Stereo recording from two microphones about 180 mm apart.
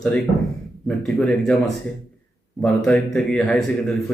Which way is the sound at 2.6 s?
5° left (ahead or behind).